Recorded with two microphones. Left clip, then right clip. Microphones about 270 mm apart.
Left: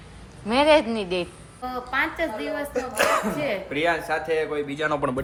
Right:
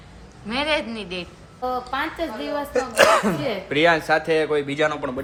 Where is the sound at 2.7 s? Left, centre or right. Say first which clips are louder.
Right 6 dB; right.